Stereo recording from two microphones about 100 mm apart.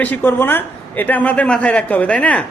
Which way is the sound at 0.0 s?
20° left (ahead or behind).